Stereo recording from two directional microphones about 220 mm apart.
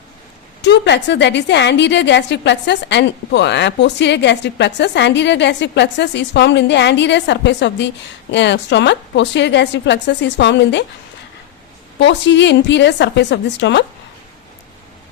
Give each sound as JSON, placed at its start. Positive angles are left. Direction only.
{"t": 0.6, "sound": "a woman's voice", "side_deg": 50}
{"t": 11.9, "sound": "a woman's voice", "side_deg": 55}